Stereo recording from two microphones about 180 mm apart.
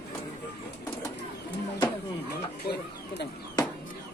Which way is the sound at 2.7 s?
65° left (ahead or behind).